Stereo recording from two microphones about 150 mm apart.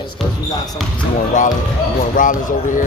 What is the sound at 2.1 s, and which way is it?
Speech, 65° left (ahead or behind).